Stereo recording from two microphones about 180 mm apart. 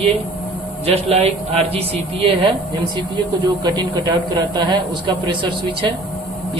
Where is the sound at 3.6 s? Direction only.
25° right (ahead or behind).